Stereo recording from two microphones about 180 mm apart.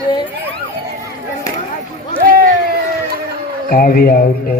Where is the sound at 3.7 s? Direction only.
55° left (ahead or behind).